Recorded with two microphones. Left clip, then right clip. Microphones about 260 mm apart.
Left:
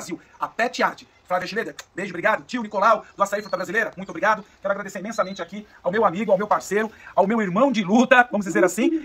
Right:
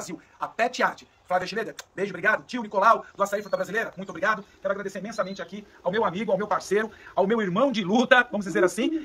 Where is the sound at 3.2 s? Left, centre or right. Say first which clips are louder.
Left 3 dB; centre.